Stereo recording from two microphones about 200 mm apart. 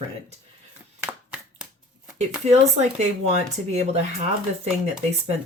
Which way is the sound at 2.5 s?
35° right (ahead or behind).